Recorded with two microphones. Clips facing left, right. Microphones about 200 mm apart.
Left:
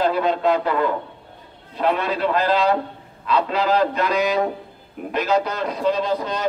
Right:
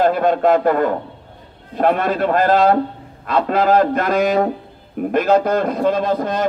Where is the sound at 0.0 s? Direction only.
50° right (ahead or behind).